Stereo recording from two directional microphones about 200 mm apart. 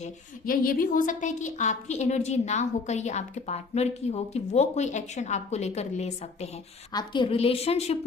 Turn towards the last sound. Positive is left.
turn(degrees=30)  # may be behind; listen again after turning